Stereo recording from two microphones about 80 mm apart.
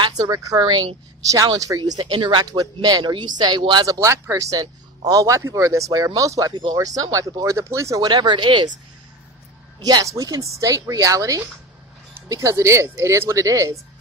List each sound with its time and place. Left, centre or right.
0.0 s speech: right
3.8 s speech: right
6.5 s speech: right
6.8 s speech: right
8.0 s speech: right
9.8 s speech: right
10.0 s speech: right